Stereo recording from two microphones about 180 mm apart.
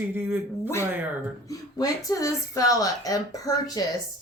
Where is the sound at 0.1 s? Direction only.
10° right (ahead or behind).